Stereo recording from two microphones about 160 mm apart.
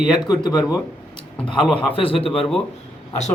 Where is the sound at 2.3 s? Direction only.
Centre (ahead or behind).